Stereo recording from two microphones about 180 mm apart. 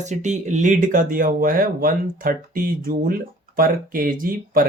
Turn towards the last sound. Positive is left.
turn(degrees=-50)  # may be behind; listen again after turning